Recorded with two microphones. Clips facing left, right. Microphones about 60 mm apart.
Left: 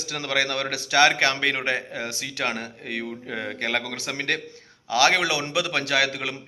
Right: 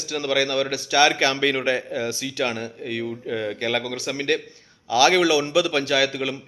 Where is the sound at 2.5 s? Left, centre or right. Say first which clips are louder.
Right 1 dB; left.